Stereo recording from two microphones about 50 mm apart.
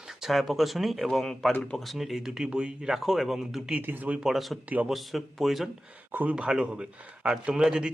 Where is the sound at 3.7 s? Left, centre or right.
Right.